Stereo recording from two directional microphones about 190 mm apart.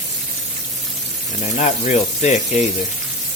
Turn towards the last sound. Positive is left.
turn(degrees=35)  # may be behind; listen again after turning